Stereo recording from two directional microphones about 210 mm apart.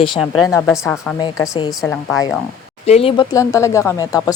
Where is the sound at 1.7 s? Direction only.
5° left (ahead or behind).